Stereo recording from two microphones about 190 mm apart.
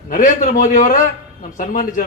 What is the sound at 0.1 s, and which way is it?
A man's voice, 40° left (ahead or behind).